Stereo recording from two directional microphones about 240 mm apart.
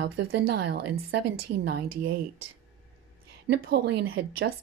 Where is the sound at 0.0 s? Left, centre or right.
Right.